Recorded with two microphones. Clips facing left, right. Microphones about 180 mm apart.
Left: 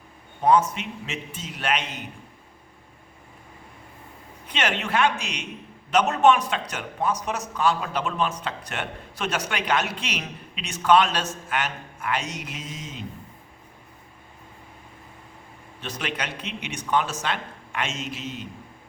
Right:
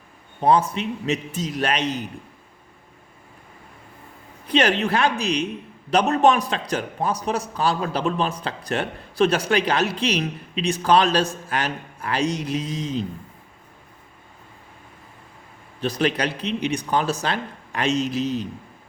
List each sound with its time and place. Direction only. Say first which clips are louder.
0.4 s a man's voice: right 1 dB; 30° right (ahead or behind)
4.4 s a man's voice: right 8 dB; 35° right (ahead or behind)
15.8 s a man's voice: right 9 dB; 35° right (ahead or behind)